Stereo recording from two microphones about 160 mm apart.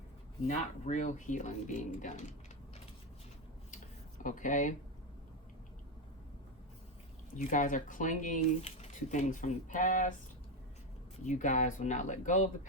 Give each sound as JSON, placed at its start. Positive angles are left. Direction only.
{"t": 0.4, "sound": "speech", "side_deg": 50}
{"t": 4.2, "sound": "speech", "side_deg": 55}
{"t": 7.3, "sound": "speech", "side_deg": 55}
{"t": 11.3, "sound": "speech", "side_deg": 50}